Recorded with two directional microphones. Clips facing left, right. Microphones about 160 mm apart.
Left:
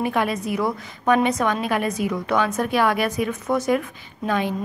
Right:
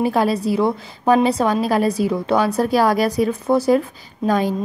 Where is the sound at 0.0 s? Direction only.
35° right (ahead or behind).